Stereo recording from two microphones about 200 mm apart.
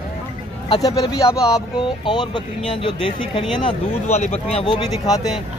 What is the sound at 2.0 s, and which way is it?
Speech, 25° left (ahead or behind).